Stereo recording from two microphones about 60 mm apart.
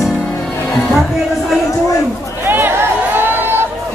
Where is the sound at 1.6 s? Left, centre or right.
Left.